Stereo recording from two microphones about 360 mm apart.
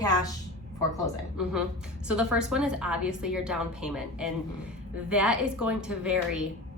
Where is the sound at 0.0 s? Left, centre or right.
Centre.